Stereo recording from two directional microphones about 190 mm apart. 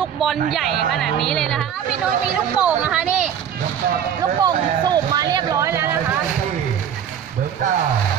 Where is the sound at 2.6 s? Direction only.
5° right (ahead or behind).